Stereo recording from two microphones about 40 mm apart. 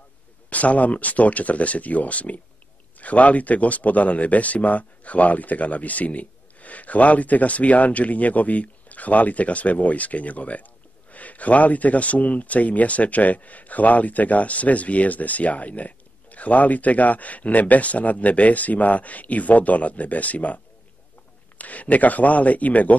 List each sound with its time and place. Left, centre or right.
0.5 s speech: left